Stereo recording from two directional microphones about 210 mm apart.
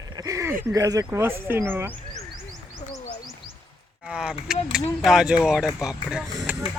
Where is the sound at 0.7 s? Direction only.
15° right (ahead or behind).